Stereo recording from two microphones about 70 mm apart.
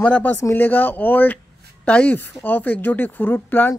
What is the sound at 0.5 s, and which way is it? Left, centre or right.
Speech, left.